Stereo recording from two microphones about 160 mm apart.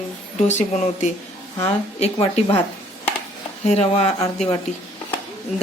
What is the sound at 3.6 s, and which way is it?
Speech, 40° left (ahead or behind).